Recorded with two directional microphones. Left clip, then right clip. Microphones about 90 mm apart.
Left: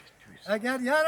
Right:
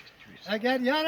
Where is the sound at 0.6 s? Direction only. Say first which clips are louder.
Even; 40° left (ahead or behind).